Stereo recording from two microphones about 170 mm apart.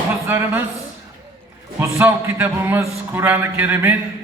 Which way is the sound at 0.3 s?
15° right (ahead or behind).